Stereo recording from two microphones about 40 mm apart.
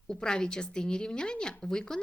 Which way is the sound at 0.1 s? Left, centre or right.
Centre.